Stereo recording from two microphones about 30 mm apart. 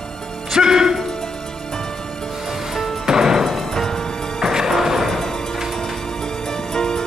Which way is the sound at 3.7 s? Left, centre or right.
Centre.